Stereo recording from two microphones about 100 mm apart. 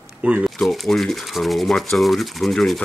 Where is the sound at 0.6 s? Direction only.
5° left (ahead or behind).